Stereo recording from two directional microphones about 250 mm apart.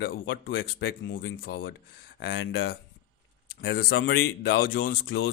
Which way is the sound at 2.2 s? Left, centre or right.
Left.